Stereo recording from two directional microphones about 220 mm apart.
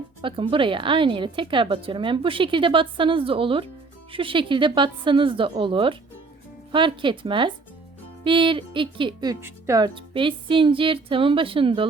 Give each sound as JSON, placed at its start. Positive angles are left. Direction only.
{"t": 0.2, "sound": "speech", "side_deg": -25}